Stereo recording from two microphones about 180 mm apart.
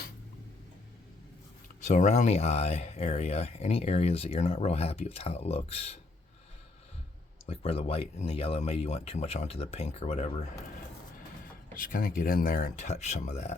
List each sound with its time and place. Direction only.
1.8 s speech: 45° left (ahead or behind)
7.4 s speech: 35° left (ahead or behind)
11.7 s speech: 50° left (ahead or behind)